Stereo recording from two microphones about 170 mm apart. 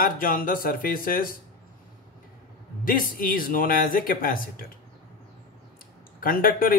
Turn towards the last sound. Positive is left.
turn(degrees=55)  # may be behind; listen again after turning